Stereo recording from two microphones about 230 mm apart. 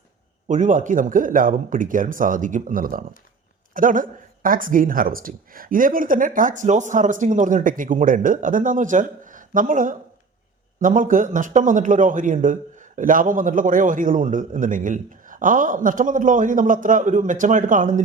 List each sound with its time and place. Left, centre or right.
0.4 s a man's voice: right